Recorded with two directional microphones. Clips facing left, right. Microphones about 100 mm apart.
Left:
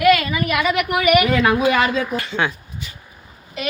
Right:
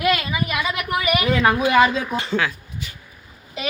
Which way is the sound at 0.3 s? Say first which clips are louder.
Left 4 dB; 60° left (ahead or behind).